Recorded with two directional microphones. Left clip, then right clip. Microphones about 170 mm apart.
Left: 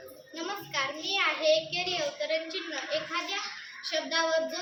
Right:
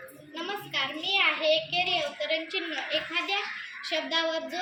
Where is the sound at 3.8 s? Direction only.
25° left (ahead or behind).